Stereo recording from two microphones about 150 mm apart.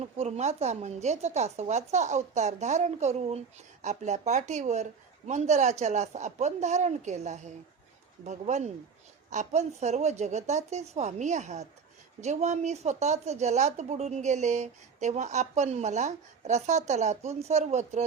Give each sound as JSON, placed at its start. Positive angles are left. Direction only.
{"t": 0.0, "sound": "speech", "side_deg": -45}